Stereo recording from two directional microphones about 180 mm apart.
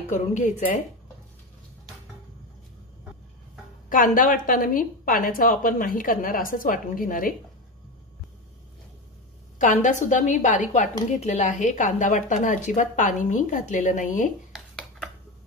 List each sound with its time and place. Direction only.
0.1 s a woman's voice: 45° left (ahead or behind)
3.9 s a woman's voice: 50° left (ahead or behind)
9.6 s a woman's voice: 45° left (ahead or behind)